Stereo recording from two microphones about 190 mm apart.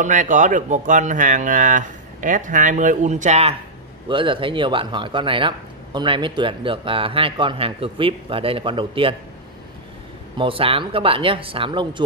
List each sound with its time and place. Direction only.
0.0 s speech: 40° right (ahead or behind)
10.3 s speech: 30° right (ahead or behind)